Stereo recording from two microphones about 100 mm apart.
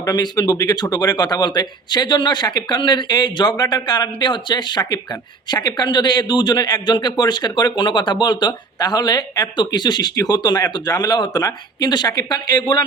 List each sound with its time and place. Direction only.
0.0 s a man's voice: 45° left (ahead or behind)